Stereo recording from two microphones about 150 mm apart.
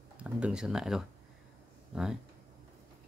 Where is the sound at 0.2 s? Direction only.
5° right (ahead or behind).